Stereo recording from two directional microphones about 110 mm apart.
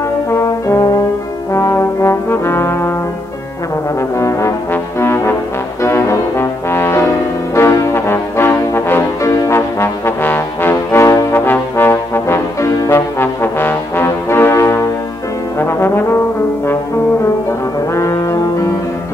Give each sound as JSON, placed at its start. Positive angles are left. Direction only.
{"t": 0.3, "sound": "brass instrument", "side_deg": 25}
{"t": 4.2, "sound": "trombone", "side_deg": 25}
{"t": 5.0, "sound": "brass instrument", "side_deg": 25}
{"t": 11.4, "sound": "trombone", "side_deg": 20}
{"t": 15.6, "sound": "brass instrument", "side_deg": 20}
{"t": 17.9, "sound": "brass instrument", "side_deg": 30}